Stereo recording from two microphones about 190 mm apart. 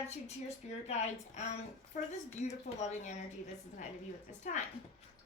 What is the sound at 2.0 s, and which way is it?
A woman's voice, 40° left (ahead or behind).